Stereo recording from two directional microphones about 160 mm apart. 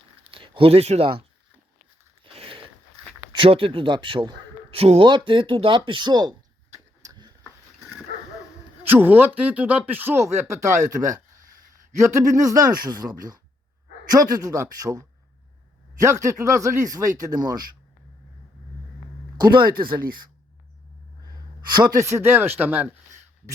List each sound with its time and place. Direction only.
0.3 s speech: 35° right (ahead or behind)
2.2 s a sound: 35° right (ahead or behind)
3.3 s a man's voice: 35° right (ahead or behind)
7.0 s a sound: 25° right (ahead or behind)
8.9 s speech: 10° right (ahead or behind)
11.9 s speech: 20° right (ahead or behind)
19.4 s speech: 30° right (ahead or behind)
21.7 s speech: 25° right (ahead or behind); by 22.9 s 10° right (ahead or behind)